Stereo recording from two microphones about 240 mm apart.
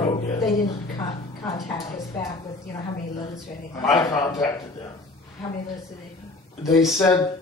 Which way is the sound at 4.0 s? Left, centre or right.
Centre.